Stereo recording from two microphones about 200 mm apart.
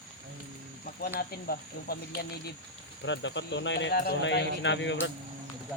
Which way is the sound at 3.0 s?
65° left (ahead or behind).